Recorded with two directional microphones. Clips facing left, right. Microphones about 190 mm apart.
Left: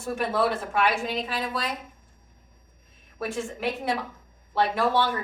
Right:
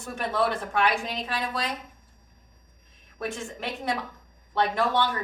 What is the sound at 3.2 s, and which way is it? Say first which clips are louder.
A woman's voice: left 4 dB; 5° left (ahead or behind).